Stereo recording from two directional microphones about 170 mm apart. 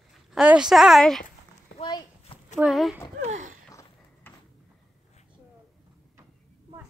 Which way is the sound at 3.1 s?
45° right (ahead or behind).